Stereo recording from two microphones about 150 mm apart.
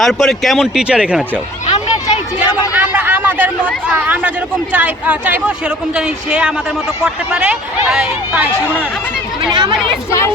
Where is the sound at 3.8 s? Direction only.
10° right (ahead or behind).